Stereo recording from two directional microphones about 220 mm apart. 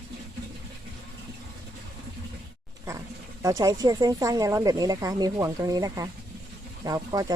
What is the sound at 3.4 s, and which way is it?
Speech, 15° right (ahead or behind).